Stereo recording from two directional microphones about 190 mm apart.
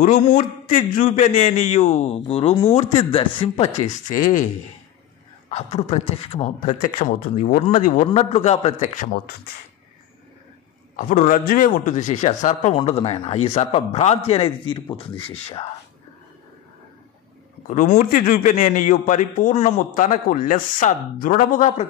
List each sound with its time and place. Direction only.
0.0 s a man's voice: 45° left (ahead or behind)
5.5 s a man's voice: 35° left (ahead or behind)
11.0 s a man's voice: 45° left (ahead or behind)
12.7 s a man's voice: 30° left (ahead or behind)
17.6 s a man's voice: 45° left (ahead or behind)